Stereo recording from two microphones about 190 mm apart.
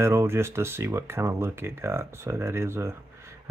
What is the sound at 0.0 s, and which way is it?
Speech, 15° right (ahead or behind).